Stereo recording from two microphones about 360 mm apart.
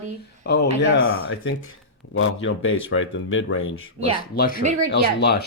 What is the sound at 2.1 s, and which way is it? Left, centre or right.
Speech, left.